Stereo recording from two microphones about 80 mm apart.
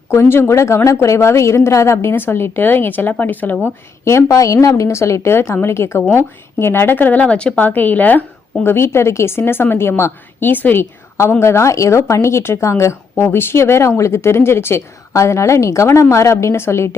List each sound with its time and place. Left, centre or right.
0.1 s a woman's voice: left
4.0 s a woman's voice: left
8.6 s a woman's voice: left
11.2 s a woman's voice: left